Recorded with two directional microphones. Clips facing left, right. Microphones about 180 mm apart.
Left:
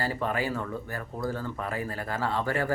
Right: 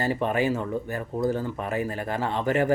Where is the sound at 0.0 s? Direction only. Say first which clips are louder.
Right 5 dB; 20° right (ahead or behind).